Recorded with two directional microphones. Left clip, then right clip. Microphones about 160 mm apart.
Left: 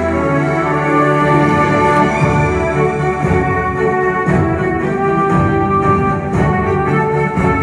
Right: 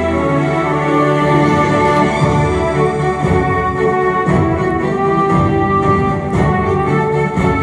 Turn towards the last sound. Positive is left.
turn(degrees=0)  # may be behind; listen again after turning